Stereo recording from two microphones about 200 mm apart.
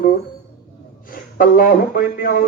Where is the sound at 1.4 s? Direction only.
45° left (ahead or behind).